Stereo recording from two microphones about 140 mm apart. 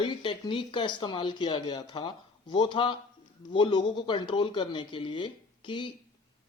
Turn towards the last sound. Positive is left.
turn(degrees=35)  # may be behind; listen again after turning